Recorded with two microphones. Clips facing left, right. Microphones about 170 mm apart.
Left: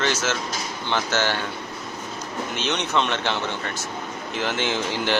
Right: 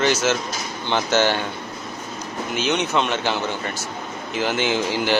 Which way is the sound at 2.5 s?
5° right (ahead or behind).